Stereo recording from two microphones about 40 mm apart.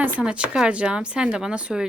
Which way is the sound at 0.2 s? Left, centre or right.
Right.